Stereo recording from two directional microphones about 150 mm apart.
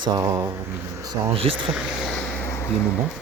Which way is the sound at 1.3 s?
35° right (ahead or behind).